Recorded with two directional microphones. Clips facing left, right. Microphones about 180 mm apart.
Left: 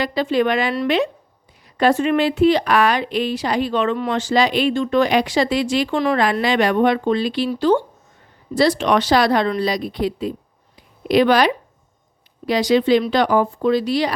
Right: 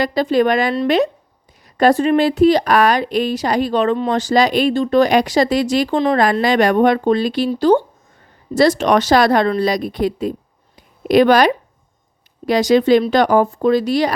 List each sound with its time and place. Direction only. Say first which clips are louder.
0.0 s speech: right 3 dB; 40° right (ahead or behind)